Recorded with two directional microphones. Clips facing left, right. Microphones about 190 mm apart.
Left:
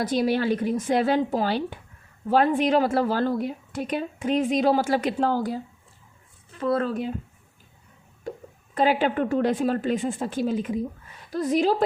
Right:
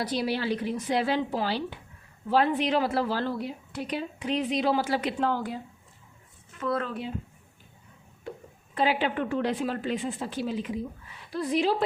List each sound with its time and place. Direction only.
0.0 s a woman's voice: 45° left (ahead or behind)
8.3 s a sound: 40° left (ahead or behind)
8.7 s a woman's voice: 45° left (ahead or behind)